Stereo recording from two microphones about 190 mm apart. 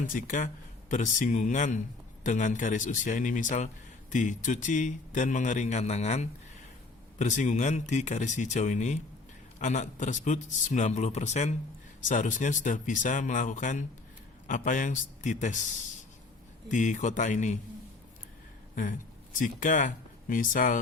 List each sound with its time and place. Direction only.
0.1 s a man's voice: 45° left (ahead or behind)
16.6 s a man's voice: 40° left (ahead or behind)
19.4 s speech: 45° left (ahead or behind)